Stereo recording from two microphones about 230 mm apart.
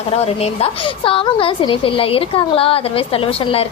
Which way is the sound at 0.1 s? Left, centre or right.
Left.